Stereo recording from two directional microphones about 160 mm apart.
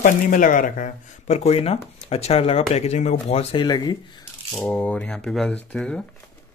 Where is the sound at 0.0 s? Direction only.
55° left (ahead or behind); by 4.2 s 25° left (ahead or behind).